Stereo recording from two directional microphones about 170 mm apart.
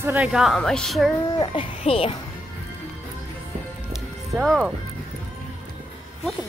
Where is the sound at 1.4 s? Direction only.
35° left (ahead or behind).